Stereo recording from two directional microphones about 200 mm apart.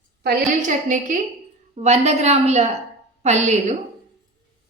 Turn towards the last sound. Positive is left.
turn(degrees=-35)  # may be behind; listen again after turning